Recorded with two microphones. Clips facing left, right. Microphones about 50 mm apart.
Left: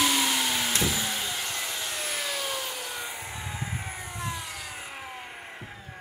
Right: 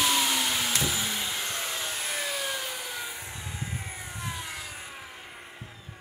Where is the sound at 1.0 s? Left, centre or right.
Centre.